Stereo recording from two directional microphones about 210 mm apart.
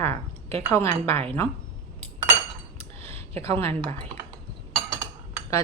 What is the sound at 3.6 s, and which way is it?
Speech, 10° left (ahead or behind).